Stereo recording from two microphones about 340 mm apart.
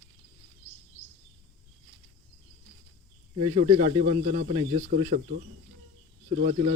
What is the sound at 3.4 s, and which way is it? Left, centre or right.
Speech, centre.